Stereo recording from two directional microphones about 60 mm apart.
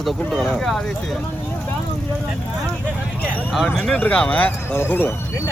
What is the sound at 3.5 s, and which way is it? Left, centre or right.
Speech, centre.